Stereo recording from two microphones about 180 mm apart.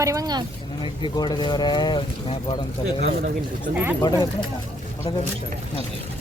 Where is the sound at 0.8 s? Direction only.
25° left (ahead or behind).